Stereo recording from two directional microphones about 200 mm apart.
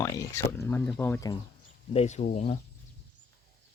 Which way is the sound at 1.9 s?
35° left (ahead or behind).